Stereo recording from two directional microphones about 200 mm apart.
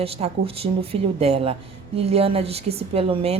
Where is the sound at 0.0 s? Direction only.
30° right (ahead or behind).